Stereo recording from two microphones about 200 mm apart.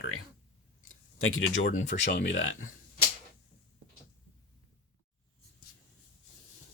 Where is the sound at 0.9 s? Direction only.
90° left; by 1.7 s 75° left (ahead or behind).